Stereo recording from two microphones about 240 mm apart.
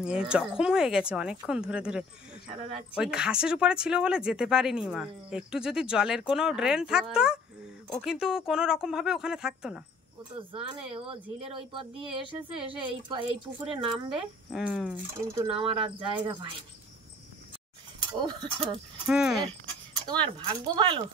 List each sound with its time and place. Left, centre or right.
0.0 s speech: centre
10.5 s speech: right
14.5 s speech: centre
15.4 s speech: right
18.0 s speech: centre
19.0 s speech: centre
20.1 s speech: centre